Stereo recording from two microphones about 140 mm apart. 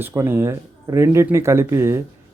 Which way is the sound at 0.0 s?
15° right (ahead or behind).